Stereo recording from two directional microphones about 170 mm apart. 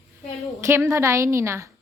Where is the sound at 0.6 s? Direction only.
15° right (ahead or behind).